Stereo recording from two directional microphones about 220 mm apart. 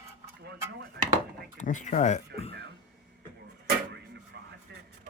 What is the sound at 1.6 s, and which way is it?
Speech, 35° left (ahead or behind).